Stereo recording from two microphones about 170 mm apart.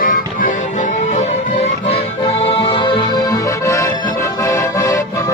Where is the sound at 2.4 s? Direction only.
30° left (ahead or behind).